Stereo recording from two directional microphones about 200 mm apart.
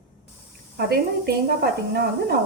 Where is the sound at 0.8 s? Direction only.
50° right (ahead or behind).